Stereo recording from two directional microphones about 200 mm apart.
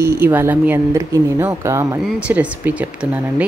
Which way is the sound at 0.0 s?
10° right (ahead or behind).